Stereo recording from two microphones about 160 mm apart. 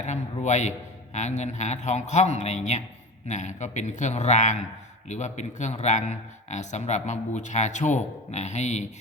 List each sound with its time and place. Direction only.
0.0 s a man's voice: 45° left (ahead or behind)